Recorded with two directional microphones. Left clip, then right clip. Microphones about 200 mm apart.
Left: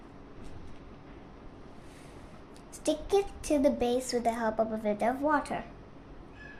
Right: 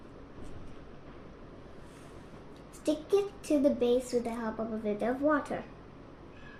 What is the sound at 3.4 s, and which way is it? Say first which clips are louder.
A woman's voice: even; 35° left (ahead or behind).